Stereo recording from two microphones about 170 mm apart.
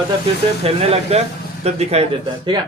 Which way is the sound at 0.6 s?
35° right (ahead or behind).